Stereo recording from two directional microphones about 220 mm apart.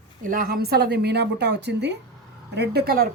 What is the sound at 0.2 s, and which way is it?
A woman's voice, 40° right (ahead or behind).